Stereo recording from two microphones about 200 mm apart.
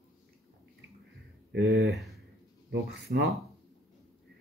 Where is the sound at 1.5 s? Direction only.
55° right (ahead or behind).